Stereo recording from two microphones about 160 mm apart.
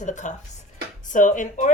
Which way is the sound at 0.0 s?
50° left (ahead or behind).